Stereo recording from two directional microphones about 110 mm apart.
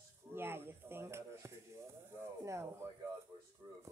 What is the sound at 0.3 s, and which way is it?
A woman's voice, 20° right (ahead or behind).